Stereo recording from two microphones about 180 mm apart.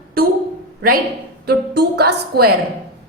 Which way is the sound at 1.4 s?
65° right (ahead or behind).